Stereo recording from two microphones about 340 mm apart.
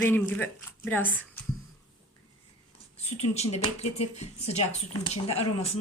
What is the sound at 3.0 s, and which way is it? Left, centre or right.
Speech, centre.